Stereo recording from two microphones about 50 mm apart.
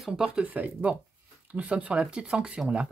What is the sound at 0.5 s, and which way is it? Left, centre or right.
Speech, right.